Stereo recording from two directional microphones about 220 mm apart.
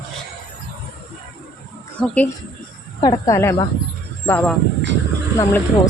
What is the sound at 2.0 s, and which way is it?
Speech, 5° left (ahead or behind).